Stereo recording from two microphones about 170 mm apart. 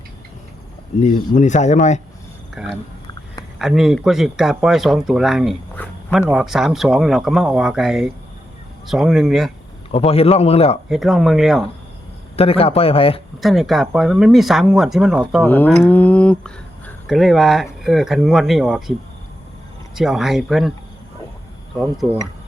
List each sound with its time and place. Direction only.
1.0 s speech: 50° left (ahead or behind)
2.6 s speech: centre (ahead or behind)
5.7 s a sound: 10° left (ahead or behind)
6.1 s speech: 5° right (ahead or behind)
9.9 s speech: 35° left (ahead or behind)
10.8 s speech: centre (ahead or behind)
12.4 s speech: 35° left (ahead or behind)
13.4 s speech: centre (ahead or behind)
15.4 s cattle: 10° left (ahead or behind)
15.9 s speech: 10° left (ahead or behind)
20.0 s speech: centre (ahead or behind)